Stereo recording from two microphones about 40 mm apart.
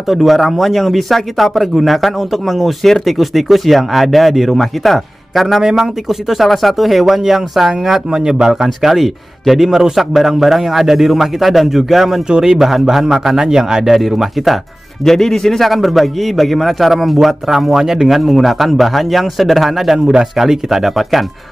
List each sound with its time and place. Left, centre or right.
0.1 s speech: centre
5.6 s a man's voice: centre
6.0 s a man's voice: centre
15.0 s speech: centre